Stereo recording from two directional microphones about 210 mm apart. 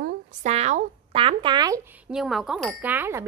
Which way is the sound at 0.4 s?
30° right (ahead or behind).